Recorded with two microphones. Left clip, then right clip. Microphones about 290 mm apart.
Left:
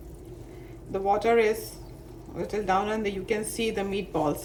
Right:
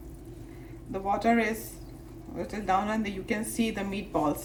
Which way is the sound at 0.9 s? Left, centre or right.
Centre.